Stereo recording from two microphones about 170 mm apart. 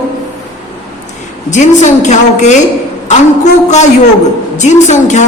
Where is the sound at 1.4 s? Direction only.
45° left (ahead or behind).